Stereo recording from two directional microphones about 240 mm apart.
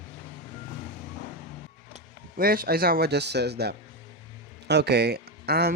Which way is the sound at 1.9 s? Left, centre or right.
Right.